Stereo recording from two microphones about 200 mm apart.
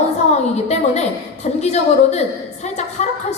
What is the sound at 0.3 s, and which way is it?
A woman's voice, 35° left (ahead or behind).